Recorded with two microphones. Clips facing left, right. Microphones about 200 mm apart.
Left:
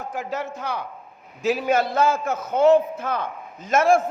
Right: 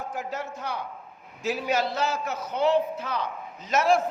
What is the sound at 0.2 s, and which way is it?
Speech, 90° left.